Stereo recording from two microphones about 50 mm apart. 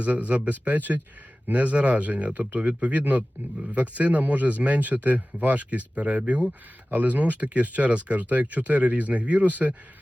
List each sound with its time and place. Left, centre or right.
0.0 s a man's voice: right